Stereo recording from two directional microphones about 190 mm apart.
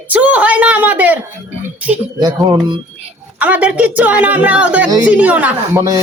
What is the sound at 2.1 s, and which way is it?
Music, 20° right (ahead or behind).